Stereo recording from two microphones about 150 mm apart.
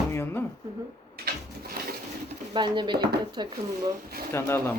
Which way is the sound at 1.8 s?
75° right (ahead or behind).